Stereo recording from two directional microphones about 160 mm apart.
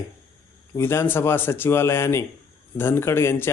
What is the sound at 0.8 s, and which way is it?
A man's voice, 15° left (ahead or behind).